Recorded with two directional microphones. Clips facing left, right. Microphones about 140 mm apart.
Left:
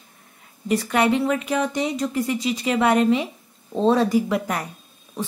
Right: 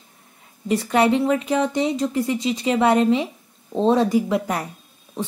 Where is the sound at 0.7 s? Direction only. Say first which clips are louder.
Right 2 dB; 30° right (ahead or behind).